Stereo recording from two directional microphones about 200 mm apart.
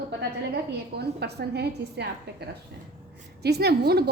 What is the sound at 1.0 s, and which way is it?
A woman's voice, 55° right (ahead or behind).